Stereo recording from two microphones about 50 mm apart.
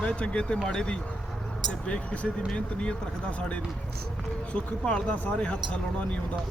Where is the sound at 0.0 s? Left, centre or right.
Left.